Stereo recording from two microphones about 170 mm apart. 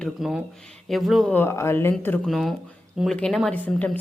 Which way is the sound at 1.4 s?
15° left (ahead or behind).